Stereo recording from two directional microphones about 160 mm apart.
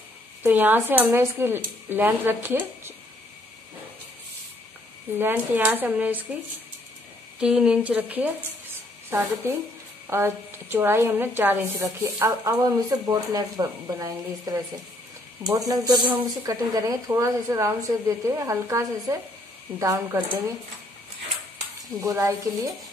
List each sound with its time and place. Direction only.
0.4 s a woman's voice: 10° right (ahead or behind)
5.1 s a woman's voice: 10° right (ahead or behind)
22.0 s speech: 20° right (ahead or behind)